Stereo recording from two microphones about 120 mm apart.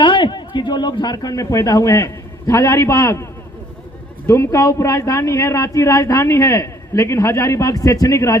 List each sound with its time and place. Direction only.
0.0 s speech: 40° left (ahead or behind); by 3.2 s 25° left (ahead or behind)
4.3 s speech: 25° left (ahead or behind)